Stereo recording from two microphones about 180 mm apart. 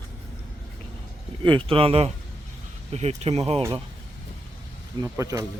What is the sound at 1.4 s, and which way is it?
Speech, 30° right (ahead or behind).